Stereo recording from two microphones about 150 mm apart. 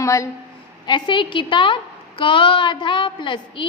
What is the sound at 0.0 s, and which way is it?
Speech, 20° left (ahead or behind).